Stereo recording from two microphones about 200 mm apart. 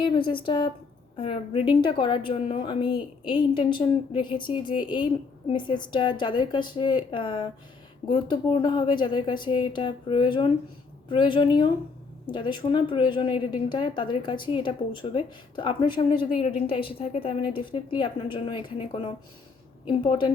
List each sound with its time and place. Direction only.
0.0 s a woman's voice: 25° left (ahead or behind)